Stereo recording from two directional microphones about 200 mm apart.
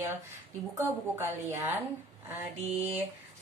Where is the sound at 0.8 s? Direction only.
15° right (ahead or behind).